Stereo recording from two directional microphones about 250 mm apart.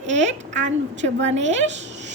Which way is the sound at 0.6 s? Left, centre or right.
Right.